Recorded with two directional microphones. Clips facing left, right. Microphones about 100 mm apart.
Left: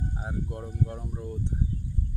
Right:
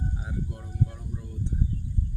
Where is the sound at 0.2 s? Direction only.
45° left (ahead or behind).